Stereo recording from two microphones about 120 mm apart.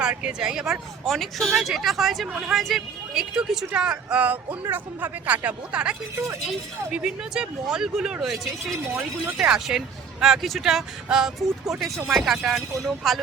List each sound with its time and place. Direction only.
0.0 s speech: 10° right (ahead or behind)
8.9 s speech: 20° right (ahead or behind)
9.4 s speech: 5° right (ahead or behind)